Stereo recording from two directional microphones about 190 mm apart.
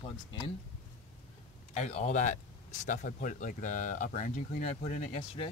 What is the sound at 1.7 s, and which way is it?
Speech, 35° left (ahead or behind).